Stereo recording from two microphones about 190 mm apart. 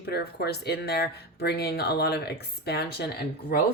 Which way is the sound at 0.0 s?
55° left (ahead or behind).